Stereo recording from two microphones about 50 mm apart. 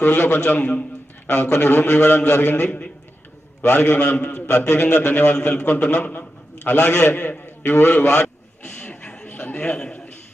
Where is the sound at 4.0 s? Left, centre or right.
Left.